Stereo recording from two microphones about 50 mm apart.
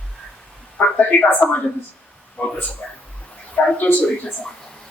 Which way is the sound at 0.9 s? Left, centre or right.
Left.